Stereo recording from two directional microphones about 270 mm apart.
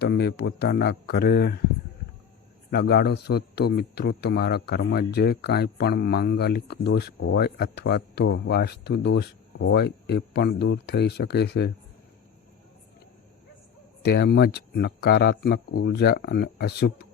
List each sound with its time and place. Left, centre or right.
0.0 s a man's voice: left
2.6 s a man's voice: left
14.0 s a man's voice: left